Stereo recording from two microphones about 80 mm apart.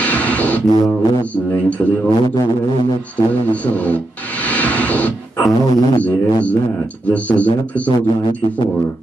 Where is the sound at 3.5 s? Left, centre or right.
Centre.